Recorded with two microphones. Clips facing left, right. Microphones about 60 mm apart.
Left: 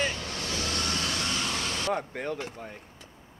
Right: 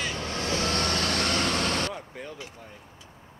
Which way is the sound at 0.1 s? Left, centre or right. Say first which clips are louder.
Right 4 dB; right.